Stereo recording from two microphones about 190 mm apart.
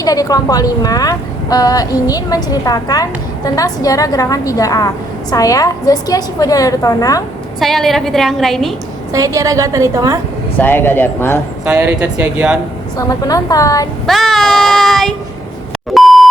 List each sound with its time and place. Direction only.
0.0 s speech: 20° left (ahead or behind)
7.6 s a woman's voice: centre (ahead or behind)
9.1 s a woman's voice: 15° right (ahead or behind)
10.6 s a woman's voice: 10° left (ahead or behind)
11.6 s a woman's voice: 5° right (ahead or behind)
13.0 s a woman's voice: 20° left (ahead or behind)
14.1 s child singing: centre (ahead or behind)
16.0 s beep: centre (ahead or behind)